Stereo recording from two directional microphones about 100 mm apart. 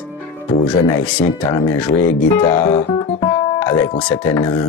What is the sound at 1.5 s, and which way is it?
Speech, 40° left (ahead or behind).